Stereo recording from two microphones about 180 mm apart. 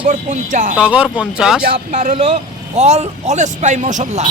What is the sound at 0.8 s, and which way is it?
Speech, 5° right (ahead or behind).